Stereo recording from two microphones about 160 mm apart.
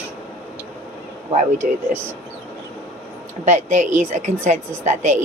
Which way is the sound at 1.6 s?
55° right (ahead or behind).